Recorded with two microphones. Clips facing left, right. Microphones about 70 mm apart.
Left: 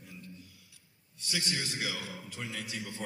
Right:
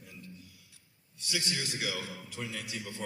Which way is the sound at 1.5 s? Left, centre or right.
Left.